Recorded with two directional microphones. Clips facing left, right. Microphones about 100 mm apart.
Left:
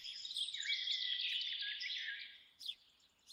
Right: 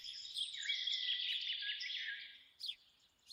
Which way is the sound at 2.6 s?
30° left (ahead or behind).